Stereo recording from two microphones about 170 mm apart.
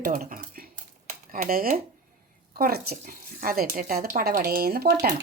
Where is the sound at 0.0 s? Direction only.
55° right (ahead or behind).